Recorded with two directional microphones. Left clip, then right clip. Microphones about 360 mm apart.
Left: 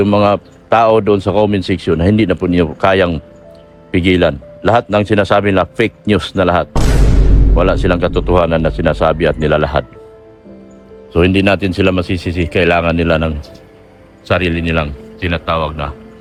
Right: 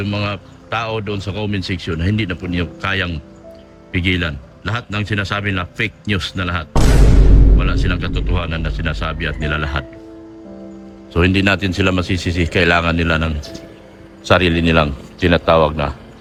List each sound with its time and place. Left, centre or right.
0.0 s speech: centre
11.1 s speech: centre